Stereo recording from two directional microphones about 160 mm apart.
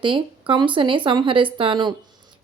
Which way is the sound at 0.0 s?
30° right (ahead or behind).